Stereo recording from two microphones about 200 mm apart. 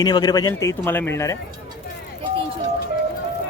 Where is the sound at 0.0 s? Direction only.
20° left (ahead or behind).